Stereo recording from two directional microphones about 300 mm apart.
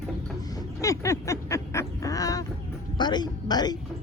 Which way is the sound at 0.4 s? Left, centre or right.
Centre.